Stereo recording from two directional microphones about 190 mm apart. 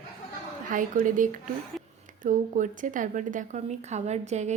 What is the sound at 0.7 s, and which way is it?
A woman's voice, 45° right (ahead or behind).